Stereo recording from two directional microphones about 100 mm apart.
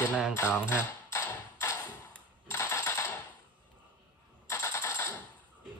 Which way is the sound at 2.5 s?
25° left (ahead or behind).